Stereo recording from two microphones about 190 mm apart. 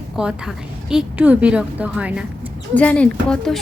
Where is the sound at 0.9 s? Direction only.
5° right (ahead or behind).